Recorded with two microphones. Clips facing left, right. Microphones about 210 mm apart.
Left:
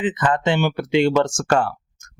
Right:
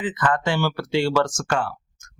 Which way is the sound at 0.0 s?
20° left (ahead or behind).